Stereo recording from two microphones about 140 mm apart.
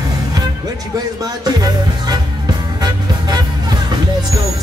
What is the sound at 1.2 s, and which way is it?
Music, 25° right (ahead or behind).